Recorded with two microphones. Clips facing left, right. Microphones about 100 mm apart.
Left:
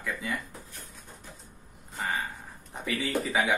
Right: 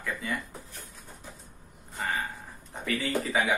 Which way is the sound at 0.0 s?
Centre (ahead or behind).